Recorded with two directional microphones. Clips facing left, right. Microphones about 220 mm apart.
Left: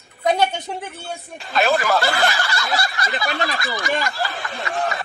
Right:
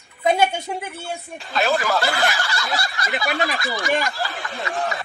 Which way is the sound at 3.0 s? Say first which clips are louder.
Right 1 dB; 10° right (ahead or behind).